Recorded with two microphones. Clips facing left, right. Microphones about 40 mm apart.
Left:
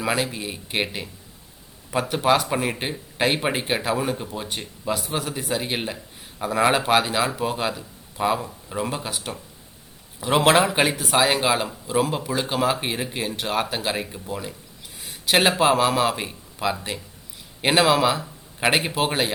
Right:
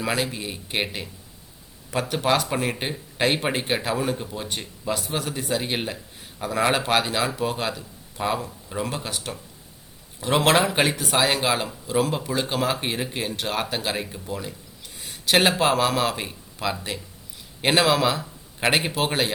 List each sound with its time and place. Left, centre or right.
0.0 s speech: centre